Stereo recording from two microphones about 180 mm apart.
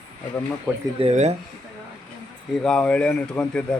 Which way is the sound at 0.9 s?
35° right (ahead or behind).